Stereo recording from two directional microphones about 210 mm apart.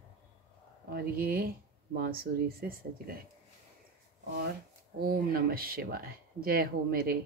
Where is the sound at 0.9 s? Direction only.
45° right (ahead or behind).